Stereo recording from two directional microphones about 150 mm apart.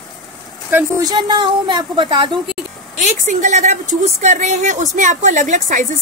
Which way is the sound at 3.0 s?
55° right (ahead or behind).